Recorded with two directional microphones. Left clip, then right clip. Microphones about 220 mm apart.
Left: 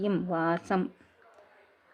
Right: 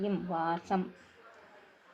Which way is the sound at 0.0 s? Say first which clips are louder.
Left 4 dB; 45° left (ahead or behind).